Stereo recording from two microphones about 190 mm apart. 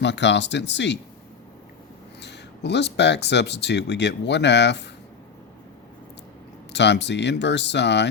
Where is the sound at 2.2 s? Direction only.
65° left (ahead or behind).